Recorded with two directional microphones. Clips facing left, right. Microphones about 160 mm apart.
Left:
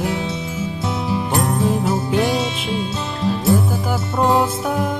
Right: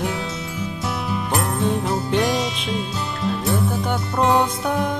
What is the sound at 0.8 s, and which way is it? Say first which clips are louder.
Music: left 4 dB; 25° left (ahead or behind).